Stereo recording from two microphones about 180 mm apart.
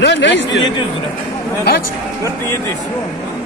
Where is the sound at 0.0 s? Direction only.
75° left (ahead or behind).